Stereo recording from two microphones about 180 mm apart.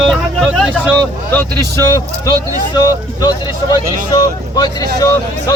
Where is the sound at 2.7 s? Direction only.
20° left (ahead or behind).